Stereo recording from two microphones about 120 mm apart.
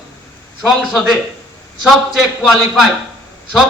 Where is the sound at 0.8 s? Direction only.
Centre (ahead or behind).